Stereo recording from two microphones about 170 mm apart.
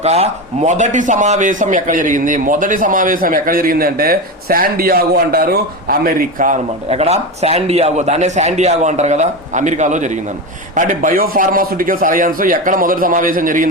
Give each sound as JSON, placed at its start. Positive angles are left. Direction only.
{"t": 0.0, "sound": "a man's voice", "side_deg": -40}
{"t": 6.8, "sound": "a man's voice", "side_deg": -35}